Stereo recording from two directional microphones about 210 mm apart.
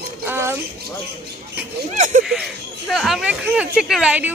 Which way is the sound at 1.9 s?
35° right (ahead or behind).